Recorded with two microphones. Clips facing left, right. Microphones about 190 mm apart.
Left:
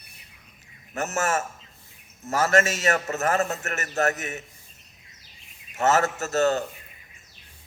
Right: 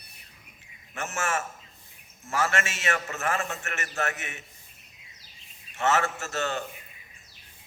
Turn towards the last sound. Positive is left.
turn(degrees=40)  # may be behind; listen again after turning